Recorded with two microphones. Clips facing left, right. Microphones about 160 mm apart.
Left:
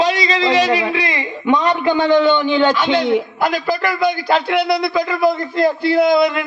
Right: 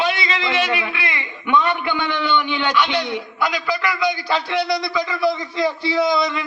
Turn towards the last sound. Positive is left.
turn(degrees=55)  # may be behind; listen again after turning